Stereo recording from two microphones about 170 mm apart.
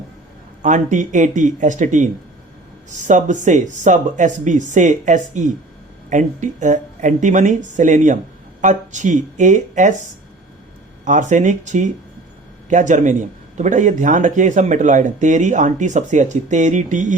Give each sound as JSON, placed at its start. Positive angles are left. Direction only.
{"t": 0.6, "sound": "a man's voice", "side_deg": -45}
{"t": 11.0, "sound": "a man's voice", "side_deg": -45}